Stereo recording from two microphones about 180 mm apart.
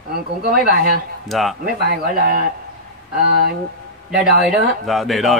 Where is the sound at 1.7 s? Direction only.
55° right (ahead or behind).